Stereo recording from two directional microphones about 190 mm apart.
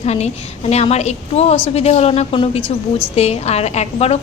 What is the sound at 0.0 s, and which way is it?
A woman's voice, 35° left (ahead or behind).